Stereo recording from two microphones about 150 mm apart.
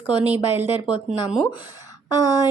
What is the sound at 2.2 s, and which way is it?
Speech, 25° left (ahead or behind).